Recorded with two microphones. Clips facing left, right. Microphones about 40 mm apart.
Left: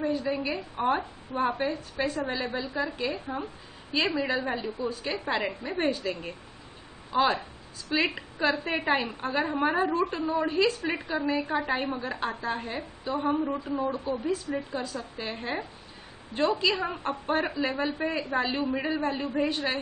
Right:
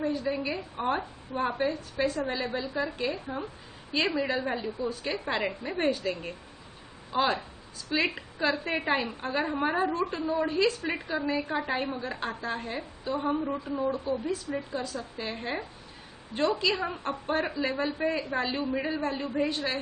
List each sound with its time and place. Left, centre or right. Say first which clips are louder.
0.0 s a woman's voice: left 1 dB; centre
14.1 s a woman's voice: left 1 dB; centre
18.9 s a woman's voice: left 1 dB; centre